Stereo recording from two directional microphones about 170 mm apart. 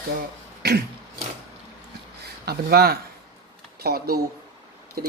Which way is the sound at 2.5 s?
65° right (ahead or behind).